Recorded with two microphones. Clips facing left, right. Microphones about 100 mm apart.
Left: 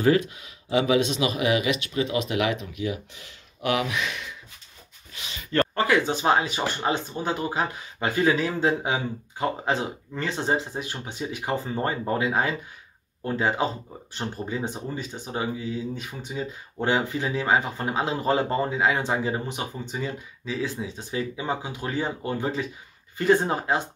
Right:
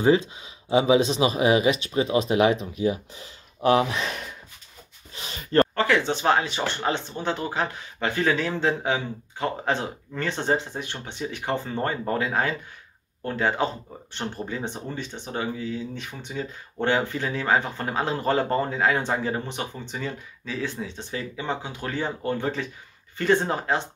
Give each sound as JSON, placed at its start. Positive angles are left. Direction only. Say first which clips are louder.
{"t": 0.0, "sound": "speech", "louder": "right 1 dB", "side_deg": -25}
{"t": 5.1, "sound": "a sound", "louder": "right 4 dB", "side_deg": -35}
{"t": 5.8, "sound": "speech", "louder": "even", "side_deg": 10}
{"t": 12.1, "sound": "speech", "louder": "left 1 dB", "side_deg": 15}